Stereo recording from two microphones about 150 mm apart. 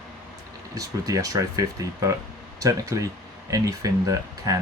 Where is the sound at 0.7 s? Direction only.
25° right (ahead or behind).